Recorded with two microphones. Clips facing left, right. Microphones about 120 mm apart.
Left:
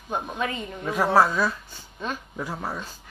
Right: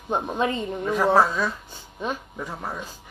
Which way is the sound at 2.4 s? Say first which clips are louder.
Left 5 dB; 5° left (ahead or behind).